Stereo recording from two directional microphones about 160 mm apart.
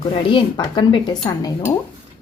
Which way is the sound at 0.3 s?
30° left (ahead or behind).